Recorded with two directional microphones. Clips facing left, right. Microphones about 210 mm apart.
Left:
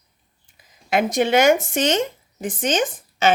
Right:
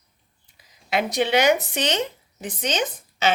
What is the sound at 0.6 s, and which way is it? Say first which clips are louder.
Speech: left 4 dB; 50° left (ahead or behind).